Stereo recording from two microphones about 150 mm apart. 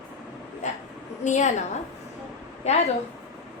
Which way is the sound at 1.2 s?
55° left (ahead or behind).